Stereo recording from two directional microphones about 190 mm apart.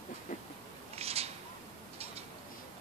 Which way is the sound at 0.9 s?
30° right (ahead or behind).